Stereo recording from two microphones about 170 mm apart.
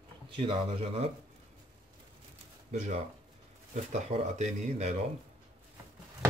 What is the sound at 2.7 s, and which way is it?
Speech, 45° right (ahead or behind).